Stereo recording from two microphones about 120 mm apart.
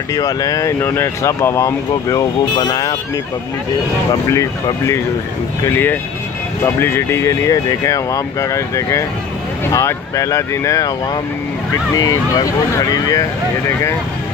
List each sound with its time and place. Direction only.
0.1 s speech: 30° left (ahead or behind)
4.3 s speech: 25° left (ahead or behind)
12.0 s speech: 30° left (ahead or behind)